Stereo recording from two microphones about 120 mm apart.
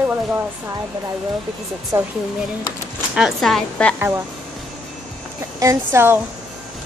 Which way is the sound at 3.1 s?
Centre (ahead or behind).